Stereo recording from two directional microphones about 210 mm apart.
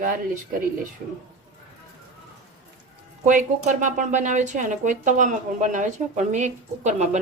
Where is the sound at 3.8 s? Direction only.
35° right (ahead or behind).